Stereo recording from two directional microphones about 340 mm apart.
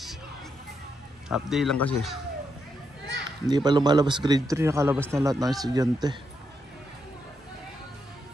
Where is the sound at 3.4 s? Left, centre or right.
Centre.